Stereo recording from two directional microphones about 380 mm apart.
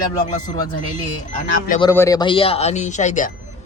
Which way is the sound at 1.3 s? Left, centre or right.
Centre.